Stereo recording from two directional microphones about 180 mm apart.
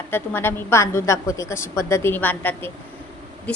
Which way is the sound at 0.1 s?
10° left (ahead or behind).